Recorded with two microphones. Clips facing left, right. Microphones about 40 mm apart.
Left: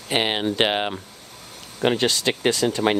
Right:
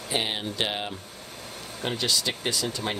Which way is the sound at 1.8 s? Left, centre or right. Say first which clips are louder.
Left 7 dB; left.